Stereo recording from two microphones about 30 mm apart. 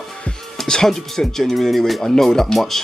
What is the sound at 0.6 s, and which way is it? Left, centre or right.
Speech, centre.